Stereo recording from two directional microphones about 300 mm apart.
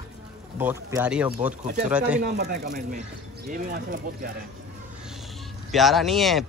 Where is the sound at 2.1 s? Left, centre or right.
Right.